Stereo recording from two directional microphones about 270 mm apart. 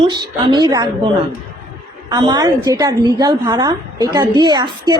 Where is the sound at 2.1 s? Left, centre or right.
Centre.